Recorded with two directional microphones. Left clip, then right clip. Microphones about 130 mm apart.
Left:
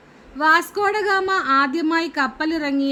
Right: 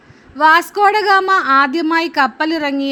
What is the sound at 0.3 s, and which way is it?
Speech, 35° right (ahead or behind).